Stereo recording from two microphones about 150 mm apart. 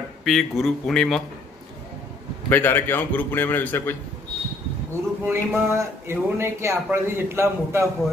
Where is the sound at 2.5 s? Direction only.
15° left (ahead or behind).